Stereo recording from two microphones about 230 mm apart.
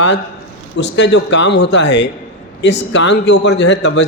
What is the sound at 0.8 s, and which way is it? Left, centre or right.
A man's voice, left.